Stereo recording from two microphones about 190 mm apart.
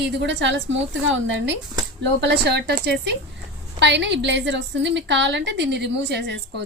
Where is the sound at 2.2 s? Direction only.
60° right (ahead or behind).